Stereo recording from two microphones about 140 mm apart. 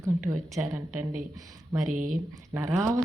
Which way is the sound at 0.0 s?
20° right (ahead or behind).